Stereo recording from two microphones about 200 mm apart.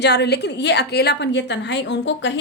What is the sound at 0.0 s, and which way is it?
A woman's voice, 55° left (ahead or behind).